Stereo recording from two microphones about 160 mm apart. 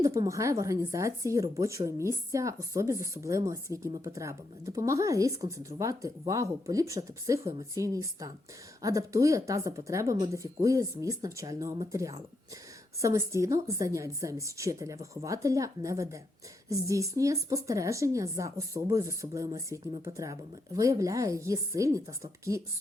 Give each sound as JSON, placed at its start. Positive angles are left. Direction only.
{"t": 0.0, "sound": "speech", "side_deg": -20}